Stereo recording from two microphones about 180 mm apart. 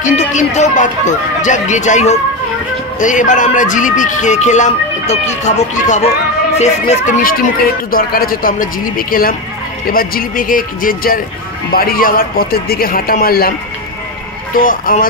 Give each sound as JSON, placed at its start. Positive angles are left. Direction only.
{"t": 0.0, "sound": "a man's voice", "side_deg": 40}
{"t": 14.6, "sound": "speech", "side_deg": 50}